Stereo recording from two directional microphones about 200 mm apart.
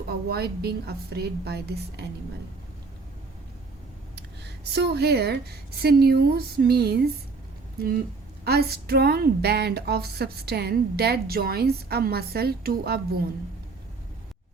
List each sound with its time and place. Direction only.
0.3 s speech: 50° right (ahead or behind)
4.1 s speech: 55° right (ahead or behind)
8.4 s speech: 50° right (ahead or behind)